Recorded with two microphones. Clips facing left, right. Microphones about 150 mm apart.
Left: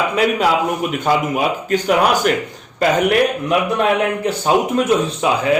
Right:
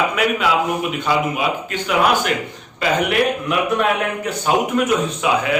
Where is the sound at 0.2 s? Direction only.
40° left (ahead or behind).